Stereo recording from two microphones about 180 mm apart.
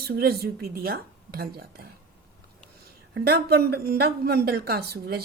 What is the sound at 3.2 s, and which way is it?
Speech, 65° right (ahead or behind).